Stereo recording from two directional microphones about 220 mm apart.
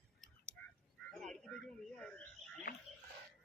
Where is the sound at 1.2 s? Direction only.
5° left (ahead or behind).